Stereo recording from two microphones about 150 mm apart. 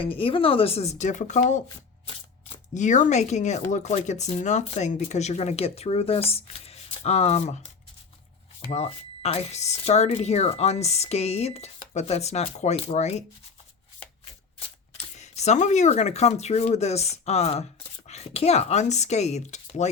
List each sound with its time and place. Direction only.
0.0 s speech: 35° left (ahead or behind); by 1.6 s 50° left (ahead or behind)
2.7 s speech: 55° left (ahead or behind)
8.7 s speech: 45° left (ahead or behind)
14.9 s speech: 45° left (ahead or behind)